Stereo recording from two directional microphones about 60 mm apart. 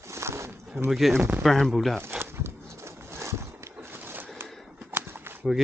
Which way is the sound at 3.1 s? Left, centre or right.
Right.